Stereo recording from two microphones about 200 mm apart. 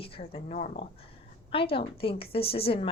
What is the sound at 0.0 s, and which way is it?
Speech, 30° left (ahead or behind).